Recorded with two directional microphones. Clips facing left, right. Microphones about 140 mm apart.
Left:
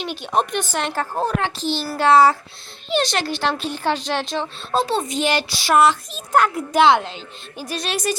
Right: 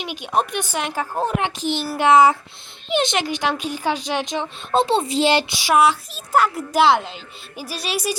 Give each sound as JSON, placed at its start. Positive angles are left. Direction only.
{"t": 0.0, "sound": "speech", "side_deg": -10}
{"t": 1.2, "sound": "speech", "side_deg": -20}
{"t": 4.8, "sound": "speech", "side_deg": -25}
{"t": 5.5, "sound": "a child's voice", "side_deg": -10}